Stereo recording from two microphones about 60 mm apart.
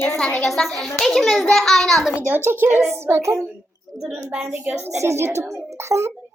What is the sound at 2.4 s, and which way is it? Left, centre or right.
Speech, right.